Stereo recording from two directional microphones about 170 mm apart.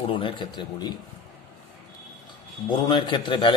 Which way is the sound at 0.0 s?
30° left (ahead or behind).